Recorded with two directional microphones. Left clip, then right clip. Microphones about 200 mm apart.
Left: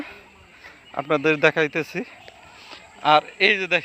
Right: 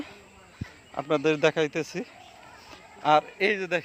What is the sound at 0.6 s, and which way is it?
Speech, 35° left (ahead or behind).